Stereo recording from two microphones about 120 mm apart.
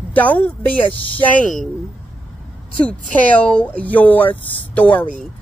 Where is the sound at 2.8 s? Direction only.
10° left (ahead or behind).